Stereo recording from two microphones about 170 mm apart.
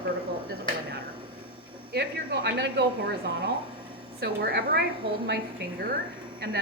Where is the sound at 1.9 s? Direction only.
80° right.